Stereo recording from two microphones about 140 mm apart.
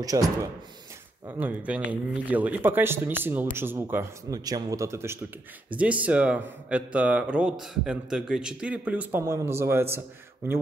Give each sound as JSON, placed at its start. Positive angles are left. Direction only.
{"t": 0.0, "sound": "speech", "side_deg": -25}
{"t": 1.2, "sound": "speech", "side_deg": -10}